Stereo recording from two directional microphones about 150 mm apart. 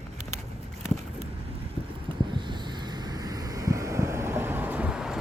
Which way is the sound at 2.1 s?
30° right (ahead or behind).